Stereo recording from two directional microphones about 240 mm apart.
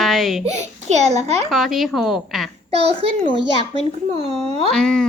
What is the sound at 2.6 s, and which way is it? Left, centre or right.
Speech, right.